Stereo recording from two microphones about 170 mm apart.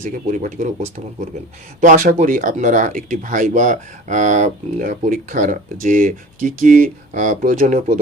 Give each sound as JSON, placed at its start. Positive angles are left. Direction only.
{"t": 0.0, "sound": "speech", "side_deg": -45}